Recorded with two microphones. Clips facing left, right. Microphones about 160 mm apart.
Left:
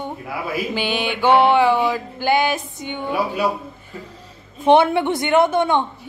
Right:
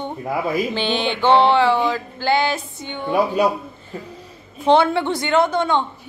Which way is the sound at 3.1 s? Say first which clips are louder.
Right 4 dB; 20° right (ahead or behind).